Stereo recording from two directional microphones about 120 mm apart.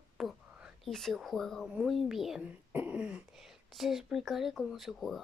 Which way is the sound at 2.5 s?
15° right (ahead or behind).